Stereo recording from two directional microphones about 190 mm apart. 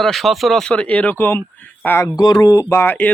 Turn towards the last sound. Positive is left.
turn(degrees=10)  # may be behind; listen again after turning